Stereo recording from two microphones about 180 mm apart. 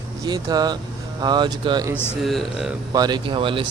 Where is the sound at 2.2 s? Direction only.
Centre (ahead or behind).